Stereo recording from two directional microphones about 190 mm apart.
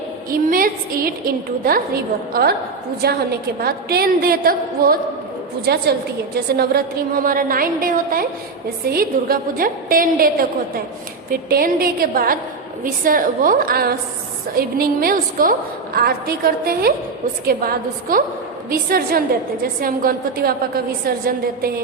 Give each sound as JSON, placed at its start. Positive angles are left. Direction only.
{"t": 0.3, "sound": "a woman's voice", "side_deg": -50}